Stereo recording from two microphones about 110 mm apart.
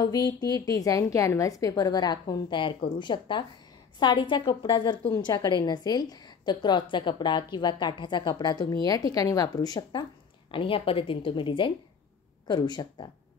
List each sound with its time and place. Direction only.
0.0 s a woman's voice: 35° left (ahead or behind)
10.5 s a woman's voice: 55° left (ahead or behind)